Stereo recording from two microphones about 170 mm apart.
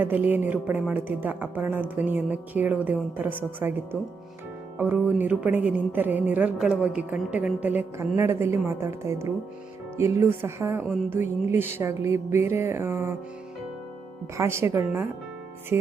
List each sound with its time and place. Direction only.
0.0 s speech: 10° right (ahead or behind)
4.8 s speech: 10° right (ahead or behind)
14.3 s speech: 15° right (ahead or behind)